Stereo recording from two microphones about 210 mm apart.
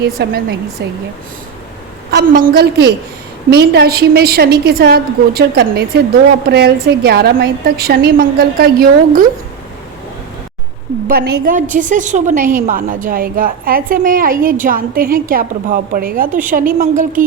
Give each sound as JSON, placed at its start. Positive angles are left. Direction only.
{"t": 0.0, "sound": "a woman's voice", "side_deg": -50}
{"t": 2.0, "sound": "a woman's voice", "side_deg": -45}
{"t": 11.1, "sound": "a woman's voice", "side_deg": -45}